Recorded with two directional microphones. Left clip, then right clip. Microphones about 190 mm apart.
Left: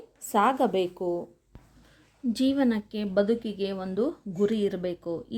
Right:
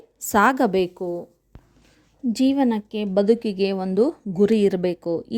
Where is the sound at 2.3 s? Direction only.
30° right (ahead or behind).